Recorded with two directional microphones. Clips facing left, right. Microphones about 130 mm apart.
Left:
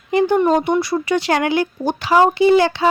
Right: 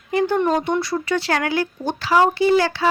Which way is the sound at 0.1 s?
20° left (ahead or behind).